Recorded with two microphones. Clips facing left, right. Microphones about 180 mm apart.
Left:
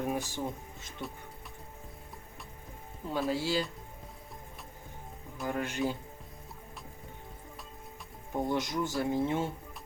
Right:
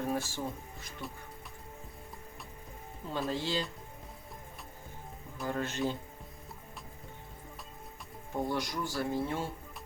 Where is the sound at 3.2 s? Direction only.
5° left (ahead or behind).